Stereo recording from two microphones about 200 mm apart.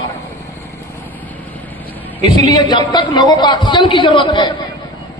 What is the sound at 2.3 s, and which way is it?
A man's voice, 20° left (ahead or behind).